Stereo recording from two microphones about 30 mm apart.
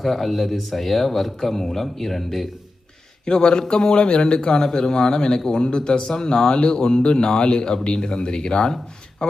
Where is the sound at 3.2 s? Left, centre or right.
Left.